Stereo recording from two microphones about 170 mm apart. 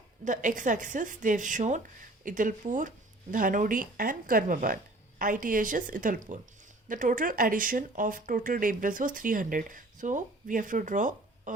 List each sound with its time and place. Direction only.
0.3 s speech: 50° right (ahead or behind)